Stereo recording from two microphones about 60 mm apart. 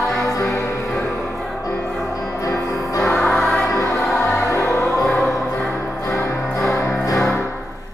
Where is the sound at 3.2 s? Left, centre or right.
Centre.